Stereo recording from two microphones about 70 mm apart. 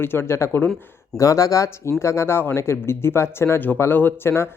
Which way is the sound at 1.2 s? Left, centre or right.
Left.